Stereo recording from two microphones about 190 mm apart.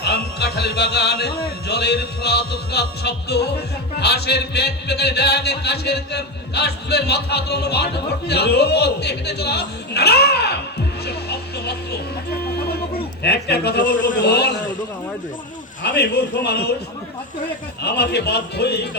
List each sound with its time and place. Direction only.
0.0 s a man's voice: 60° left (ahead or behind)
11.0 s a sound: 60° left (ahead or behind)
13.2 s a man's voice: 60° left (ahead or behind)
13.9 s a man's voice: 45° left (ahead or behind)
14.2 s a man's voice: 60° left (ahead or behind)
15.8 s a man's voice: 60° left (ahead or behind)
17.8 s a man's voice: 60° left (ahead or behind)